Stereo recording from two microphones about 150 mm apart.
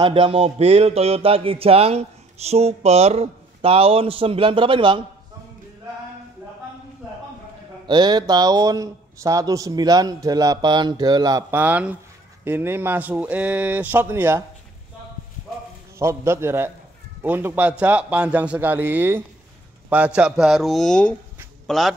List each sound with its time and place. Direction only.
0.0 s a sound: 35° right (ahead or behind)
7.8 s speech: 30° right (ahead or behind)
11.5 s a man's voice: 10° right (ahead or behind)
16.0 s a man's voice: 20° right (ahead or behind); by 21.9 s centre (ahead or behind)